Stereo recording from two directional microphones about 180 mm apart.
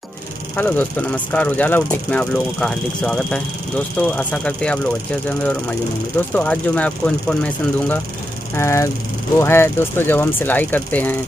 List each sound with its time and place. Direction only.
0.6 s speech: 10° left (ahead or behind)